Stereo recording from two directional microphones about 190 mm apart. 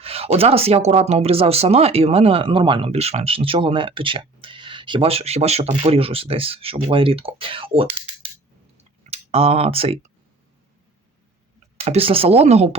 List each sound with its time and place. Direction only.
0.0 s speech: 30° right (ahead or behind)
8.8 s clicking: 35° right (ahead or behind)
11.8 s speech: 30° right (ahead or behind)